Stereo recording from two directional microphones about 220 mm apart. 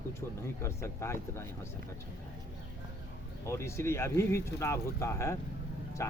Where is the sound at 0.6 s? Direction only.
15° left (ahead or behind).